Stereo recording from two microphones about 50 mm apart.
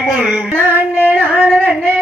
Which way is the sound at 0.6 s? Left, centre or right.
Right.